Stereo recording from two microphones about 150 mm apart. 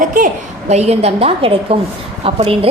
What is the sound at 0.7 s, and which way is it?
A woman's voice, 45° right (ahead or behind).